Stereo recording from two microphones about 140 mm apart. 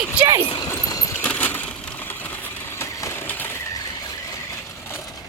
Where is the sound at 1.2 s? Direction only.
15° left (ahead or behind).